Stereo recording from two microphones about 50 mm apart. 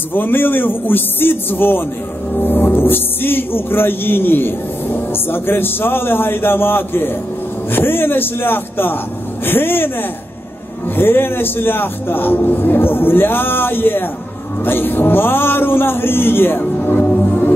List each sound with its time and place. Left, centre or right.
0.1 s a man's voice: left
2.3 s music: left
7.7 s a man's voice: left
11.0 s a man's voice: left